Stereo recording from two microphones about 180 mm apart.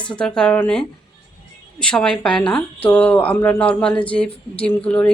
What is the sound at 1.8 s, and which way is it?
A woman's voice, 5° left (ahead or behind).